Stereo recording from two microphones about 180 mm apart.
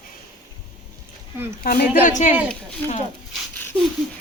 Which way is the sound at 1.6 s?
55° left (ahead or behind).